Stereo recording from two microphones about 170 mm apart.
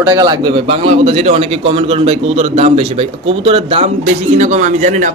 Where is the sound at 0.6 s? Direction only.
35° right (ahead or behind).